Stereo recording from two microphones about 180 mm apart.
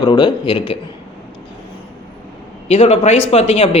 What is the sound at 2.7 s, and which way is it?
Speech, 35° left (ahead or behind).